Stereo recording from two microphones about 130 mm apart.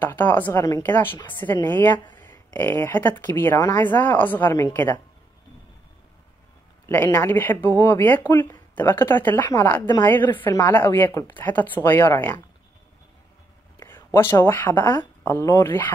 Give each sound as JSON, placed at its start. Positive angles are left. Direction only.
{"t": 0.0, "sound": "speech", "side_deg": 15}
{"t": 6.9, "sound": "speech", "side_deg": 15}
{"t": 9.8, "sound": "a woman's voice", "side_deg": 35}
{"t": 10.0, "sound": "speech", "side_deg": 15}
{"t": 13.7, "sound": "speech", "side_deg": 20}